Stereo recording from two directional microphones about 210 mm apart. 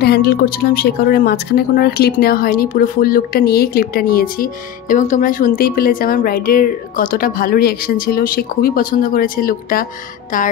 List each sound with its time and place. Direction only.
0.0 s speech: 45° left (ahead or behind)
10.3 s music: 40° left (ahead or behind)